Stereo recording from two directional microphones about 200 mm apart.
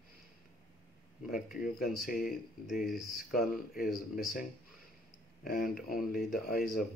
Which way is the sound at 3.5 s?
45° left (ahead or behind).